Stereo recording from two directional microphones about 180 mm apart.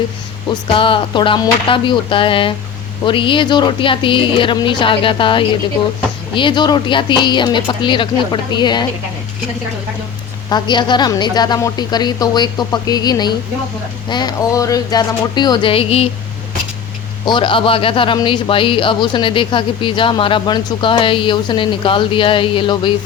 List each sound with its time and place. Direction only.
0.8 s speech: 30° left (ahead or behind)
10.5 s speech: 25° left (ahead or behind)
17.2 s speech: 25° left (ahead or behind)